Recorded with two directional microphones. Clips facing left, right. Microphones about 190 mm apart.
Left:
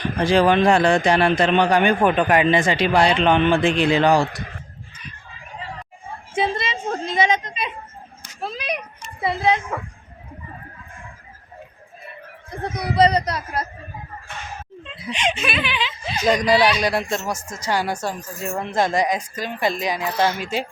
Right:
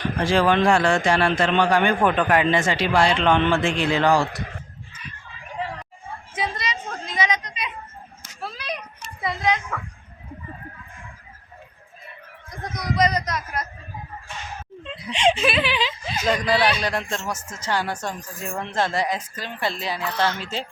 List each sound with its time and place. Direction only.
0.2 s a woman's voice: 15° left (ahead or behind)
6.3 s a woman's voice: 25° left (ahead or behind)
12.5 s a child's voice: 30° left (ahead or behind)
15.1 s speech: 30° right (ahead or behind)
16.2 s a woman's voice: 15° left (ahead or behind)